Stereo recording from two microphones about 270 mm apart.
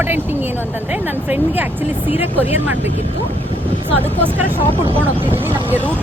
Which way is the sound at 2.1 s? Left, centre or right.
Centre.